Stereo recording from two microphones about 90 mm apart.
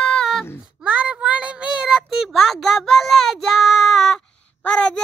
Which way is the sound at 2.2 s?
5° left (ahead or behind).